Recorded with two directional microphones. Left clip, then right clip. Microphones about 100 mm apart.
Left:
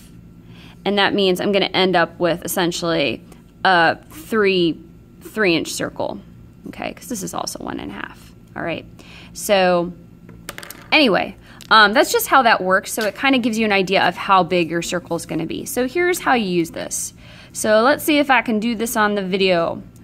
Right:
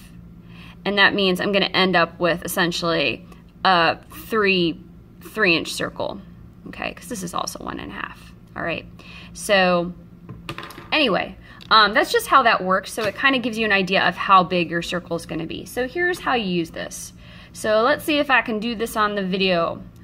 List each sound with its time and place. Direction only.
0.8 s speech: 20° left (ahead or behind)
10.7 s a woman's voice: 45° left (ahead or behind)
15.6 s a woman's voice: 65° left (ahead or behind); by 19.8 s 35° left (ahead or behind)